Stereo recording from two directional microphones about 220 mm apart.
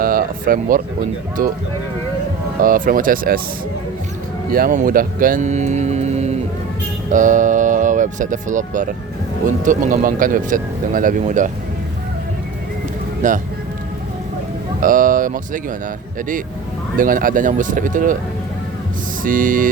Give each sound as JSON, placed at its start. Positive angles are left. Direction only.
{"t": 0.0, "sound": "speech", "side_deg": -40}
{"t": 2.6, "sound": "speech", "side_deg": -40}
{"t": 4.5, "sound": "speech", "side_deg": -40}
{"t": 13.2, "sound": "speech", "side_deg": -35}
{"t": 14.8, "sound": "speech", "side_deg": -40}
{"t": 17.0, "sound": "speech", "side_deg": -40}
{"t": 19.2, "sound": "speech", "side_deg": -40}